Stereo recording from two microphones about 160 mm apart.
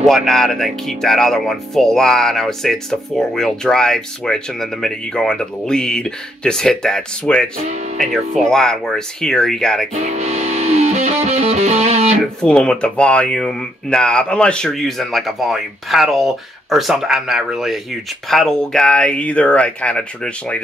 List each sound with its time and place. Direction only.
0.0 s speech: centre (ahead or behind)
8.5 s speech: 5° left (ahead or behind)
10.0 s music: 45° right (ahead or behind)
12.4 s speech: 5° left (ahead or behind)